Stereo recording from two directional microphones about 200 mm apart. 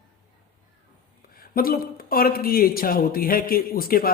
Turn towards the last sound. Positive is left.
turn(degrees=45)  # may be behind; listen again after turning